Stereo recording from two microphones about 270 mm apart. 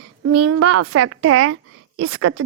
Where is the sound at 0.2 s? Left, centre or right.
Right.